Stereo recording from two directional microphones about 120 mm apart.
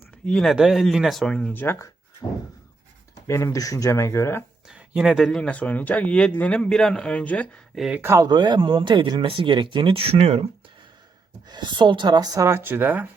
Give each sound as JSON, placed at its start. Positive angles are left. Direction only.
{"t": 0.3, "sound": "speech", "side_deg": 5}
{"t": 3.2, "sound": "speech", "side_deg": 25}
{"t": 4.7, "sound": "speech", "side_deg": -5}
{"t": 7.8, "sound": "speech", "side_deg": -5}
{"t": 8.0, "sound": "speech", "side_deg": -25}
{"t": 11.4, "sound": "speech", "side_deg": -40}